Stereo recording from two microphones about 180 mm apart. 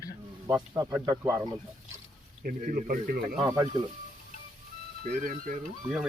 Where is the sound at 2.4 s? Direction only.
50° right (ahead or behind).